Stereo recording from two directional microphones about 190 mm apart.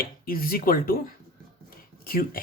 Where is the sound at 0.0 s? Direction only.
50° left (ahead or behind).